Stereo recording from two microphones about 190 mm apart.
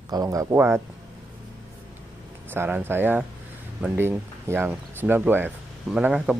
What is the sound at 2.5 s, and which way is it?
Speech, 10° right (ahead or behind).